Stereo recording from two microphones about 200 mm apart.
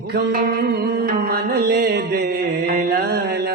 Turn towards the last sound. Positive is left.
turn(degrees=-50)  # may be behind; listen again after turning